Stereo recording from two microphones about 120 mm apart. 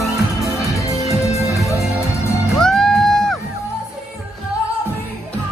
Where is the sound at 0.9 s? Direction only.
65° left (ahead or behind).